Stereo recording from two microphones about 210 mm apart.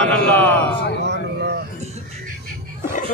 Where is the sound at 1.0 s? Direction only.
50° right (ahead or behind).